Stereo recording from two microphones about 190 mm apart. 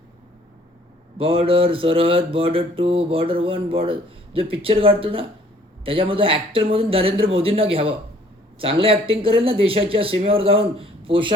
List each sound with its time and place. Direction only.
1.2 s mantra: 30° right (ahead or behind)